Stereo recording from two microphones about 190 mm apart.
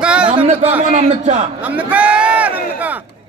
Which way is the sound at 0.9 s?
40° right (ahead or behind).